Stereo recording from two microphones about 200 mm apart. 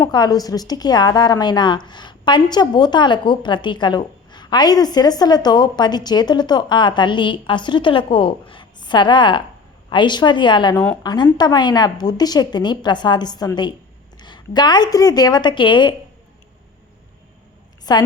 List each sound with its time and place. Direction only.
0.1 s a woman's voice: 20° left (ahead or behind)
17.9 s a woman's voice: 20° left (ahead or behind)